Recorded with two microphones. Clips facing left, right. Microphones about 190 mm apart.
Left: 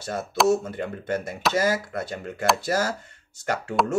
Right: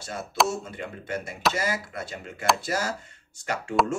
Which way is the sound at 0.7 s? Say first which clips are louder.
Left 6 dB; 50° left (ahead or behind).